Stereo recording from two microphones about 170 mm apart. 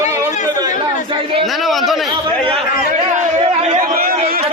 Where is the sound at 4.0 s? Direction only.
60° right (ahead or behind).